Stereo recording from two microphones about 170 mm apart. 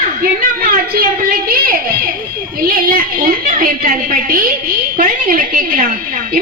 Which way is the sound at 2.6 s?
55° right (ahead or behind).